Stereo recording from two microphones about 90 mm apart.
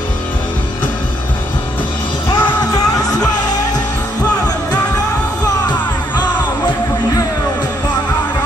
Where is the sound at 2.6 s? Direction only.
45° left (ahead or behind).